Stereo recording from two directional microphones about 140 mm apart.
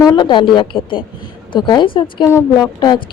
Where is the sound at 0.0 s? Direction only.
30° left (ahead or behind).